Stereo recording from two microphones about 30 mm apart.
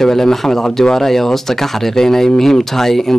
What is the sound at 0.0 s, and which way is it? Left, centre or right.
Speech, centre.